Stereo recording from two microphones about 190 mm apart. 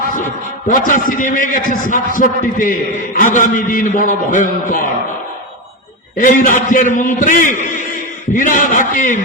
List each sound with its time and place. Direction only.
0.7 s a man's voice: 45° left (ahead or behind)
6.1 s a man's voice: 45° left (ahead or behind)